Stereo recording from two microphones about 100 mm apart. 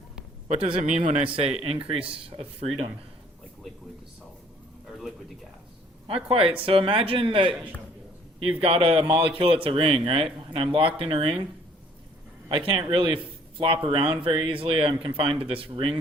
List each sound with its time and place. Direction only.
0.9 s speech: 75° right (ahead or behind)
6.1 s speech: 70° right (ahead or behind)
8.6 s speech: 70° right (ahead or behind)
12.5 s speech: 55° right (ahead or behind)